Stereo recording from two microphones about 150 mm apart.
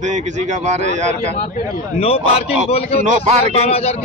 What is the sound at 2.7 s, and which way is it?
Speech, 45° left (ahead or behind).